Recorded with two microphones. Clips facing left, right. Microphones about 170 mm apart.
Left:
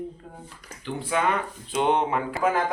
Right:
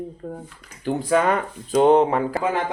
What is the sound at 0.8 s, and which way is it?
Speech, 40° right (ahead or behind).